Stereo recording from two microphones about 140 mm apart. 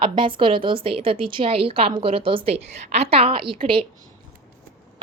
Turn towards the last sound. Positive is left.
turn(degrees=-40)  # may be behind; listen again after turning